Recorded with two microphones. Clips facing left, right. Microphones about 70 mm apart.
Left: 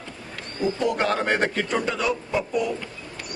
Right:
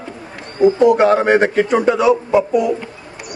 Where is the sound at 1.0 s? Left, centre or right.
Centre.